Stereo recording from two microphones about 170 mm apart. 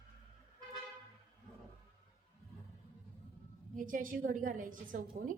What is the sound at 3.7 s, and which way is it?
A woman's voice, 55° right (ahead or behind).